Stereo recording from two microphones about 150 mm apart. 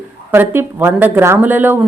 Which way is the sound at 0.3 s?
15° right (ahead or behind).